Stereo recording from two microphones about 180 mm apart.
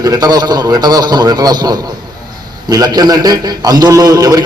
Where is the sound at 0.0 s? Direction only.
20° right (ahead or behind).